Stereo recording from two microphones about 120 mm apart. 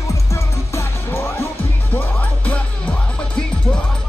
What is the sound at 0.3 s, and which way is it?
Music, 20° left (ahead or behind).